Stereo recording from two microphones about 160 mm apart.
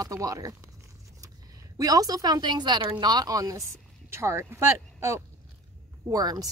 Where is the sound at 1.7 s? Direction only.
20° right (ahead or behind).